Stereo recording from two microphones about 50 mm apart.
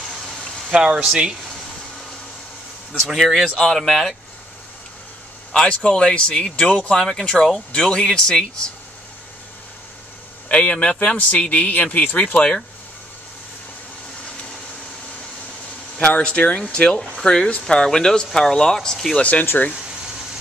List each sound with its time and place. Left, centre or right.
0.7 s speech: centre
3.0 s speech: centre
5.5 s a man's voice: centre
10.5 s speech: left
16.0 s speech: left; by 19.1 s centre
19.6 s speech: left